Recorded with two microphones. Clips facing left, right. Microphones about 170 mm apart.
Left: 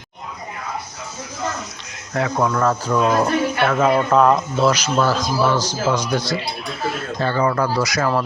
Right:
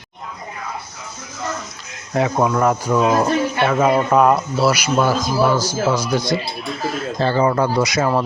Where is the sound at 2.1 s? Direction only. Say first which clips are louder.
Right 2 dB; 20° right (ahead or behind).